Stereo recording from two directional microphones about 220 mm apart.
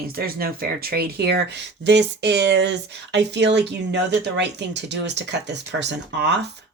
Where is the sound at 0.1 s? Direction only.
45° right (ahead or behind).